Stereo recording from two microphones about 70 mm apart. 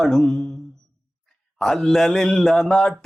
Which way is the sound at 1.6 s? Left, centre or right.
Centre.